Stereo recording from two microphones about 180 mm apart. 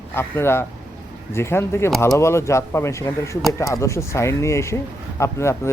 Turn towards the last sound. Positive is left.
turn(degrees=15)  # may be behind; listen again after turning